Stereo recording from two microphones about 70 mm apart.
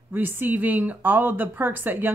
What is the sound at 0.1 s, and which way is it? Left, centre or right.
Speech, right.